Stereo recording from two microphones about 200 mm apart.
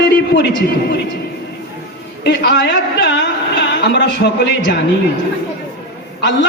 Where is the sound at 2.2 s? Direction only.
55° left (ahead or behind).